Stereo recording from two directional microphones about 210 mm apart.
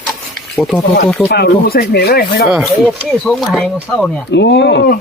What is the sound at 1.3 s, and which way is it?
Speech, 50° left (ahead or behind).